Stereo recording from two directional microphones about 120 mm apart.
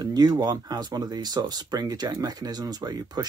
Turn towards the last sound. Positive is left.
turn(degrees=-35)  # may be behind; listen again after turning